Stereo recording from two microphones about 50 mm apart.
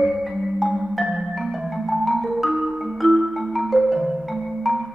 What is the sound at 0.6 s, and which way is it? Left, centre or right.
Marimba, centre.